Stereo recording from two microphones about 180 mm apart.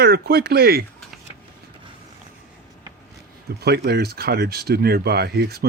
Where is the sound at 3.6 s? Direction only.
60° right (ahead or behind).